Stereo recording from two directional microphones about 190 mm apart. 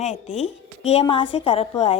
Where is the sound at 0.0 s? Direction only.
35° left (ahead or behind).